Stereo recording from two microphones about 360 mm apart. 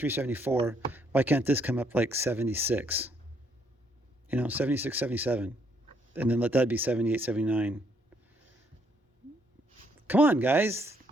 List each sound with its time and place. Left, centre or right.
0.0 s speech: centre
4.3 s speech: centre
10.1 s speech: centre